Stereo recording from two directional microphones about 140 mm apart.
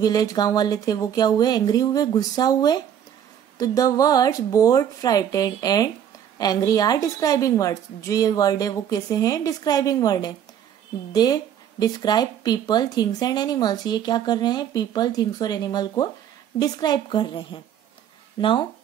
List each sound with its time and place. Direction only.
0.0 s a woman's voice: 25° left (ahead or behind)